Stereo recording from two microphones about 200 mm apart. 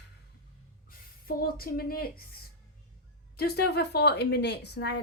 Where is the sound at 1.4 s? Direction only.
50° left (ahead or behind).